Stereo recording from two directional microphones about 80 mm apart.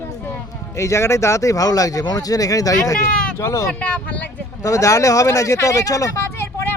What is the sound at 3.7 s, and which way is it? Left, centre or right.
Speech, centre.